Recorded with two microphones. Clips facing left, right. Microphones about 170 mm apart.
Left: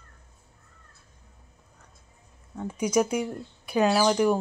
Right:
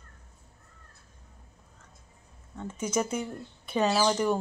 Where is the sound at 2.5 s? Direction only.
10° left (ahead or behind).